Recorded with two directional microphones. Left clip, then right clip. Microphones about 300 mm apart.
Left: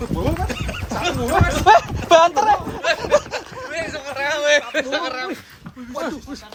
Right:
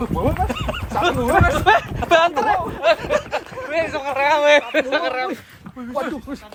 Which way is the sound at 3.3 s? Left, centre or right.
Centre.